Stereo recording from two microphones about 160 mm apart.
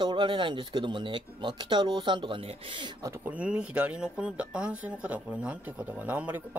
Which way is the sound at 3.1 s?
10° right (ahead or behind).